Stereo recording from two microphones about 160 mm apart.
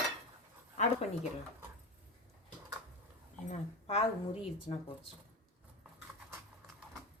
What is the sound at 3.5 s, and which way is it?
Speech, 40° left (ahead or behind).